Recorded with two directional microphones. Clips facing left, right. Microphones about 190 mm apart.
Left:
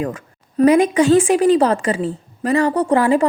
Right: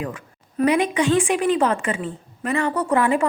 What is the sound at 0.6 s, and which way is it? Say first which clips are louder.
A woman's voice: left 6 dB; 45° left (ahead or behind).